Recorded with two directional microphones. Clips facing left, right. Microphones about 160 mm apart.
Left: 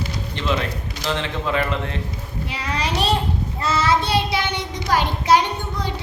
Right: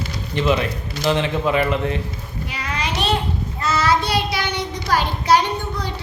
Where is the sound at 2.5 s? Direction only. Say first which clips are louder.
Left 1 dB; 30° left (ahead or behind).